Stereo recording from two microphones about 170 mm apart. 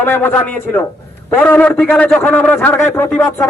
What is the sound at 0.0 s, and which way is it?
A man's voice, 10° left (ahead or behind).